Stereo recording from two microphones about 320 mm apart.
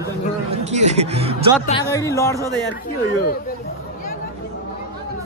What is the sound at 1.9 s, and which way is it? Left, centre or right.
Speech, centre.